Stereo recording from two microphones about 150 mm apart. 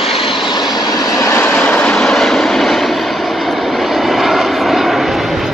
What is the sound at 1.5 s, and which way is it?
Vehicle, 5° left (ahead or behind).